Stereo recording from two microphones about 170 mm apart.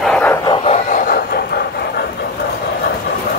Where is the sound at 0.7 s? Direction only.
45° left (ahead or behind).